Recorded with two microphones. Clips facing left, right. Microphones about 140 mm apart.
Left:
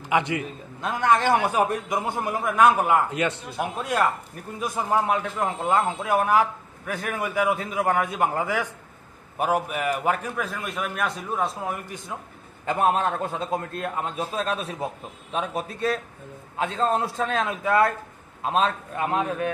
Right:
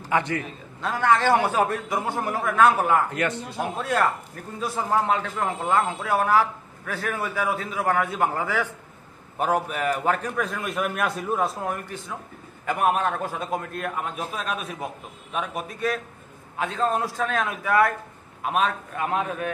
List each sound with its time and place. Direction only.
0.1 s a man's voice: 15° left (ahead or behind); by 11.8 s centre (ahead or behind)
12.6 s a man's voice: 25° left (ahead or behind)